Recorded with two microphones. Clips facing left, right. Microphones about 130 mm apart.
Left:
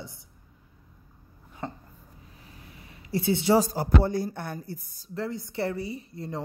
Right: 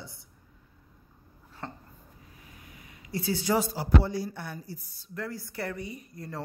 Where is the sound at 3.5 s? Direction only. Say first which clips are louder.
Left 2 dB; 45° left (ahead or behind).